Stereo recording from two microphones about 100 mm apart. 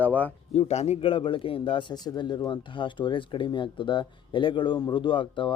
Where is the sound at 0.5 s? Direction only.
90° left.